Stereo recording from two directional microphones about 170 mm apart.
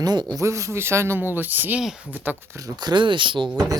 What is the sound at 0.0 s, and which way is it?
Speech, 25° right (ahead or behind).